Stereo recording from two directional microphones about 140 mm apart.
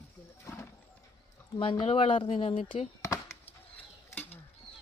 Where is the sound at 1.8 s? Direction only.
45° left (ahead or behind).